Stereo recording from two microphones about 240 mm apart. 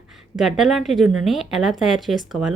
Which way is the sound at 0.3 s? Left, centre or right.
Centre.